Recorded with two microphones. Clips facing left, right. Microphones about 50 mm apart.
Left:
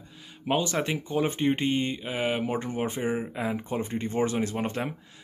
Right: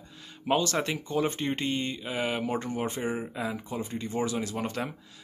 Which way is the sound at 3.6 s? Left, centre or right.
Left.